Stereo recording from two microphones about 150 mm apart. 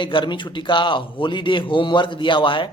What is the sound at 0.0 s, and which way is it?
A man's voice, 35° left (ahead or behind).